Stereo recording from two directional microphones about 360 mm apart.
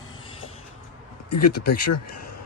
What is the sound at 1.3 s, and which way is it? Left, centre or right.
Speech, left.